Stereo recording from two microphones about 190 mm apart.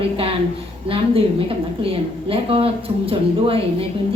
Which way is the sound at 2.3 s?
30° right (ahead or behind).